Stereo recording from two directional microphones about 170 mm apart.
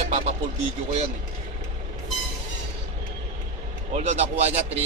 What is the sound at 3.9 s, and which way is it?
Speech, 40° right (ahead or behind).